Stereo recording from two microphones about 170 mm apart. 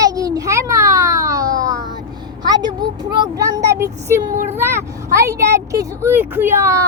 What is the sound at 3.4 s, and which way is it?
Speech, 20° right (ahead or behind).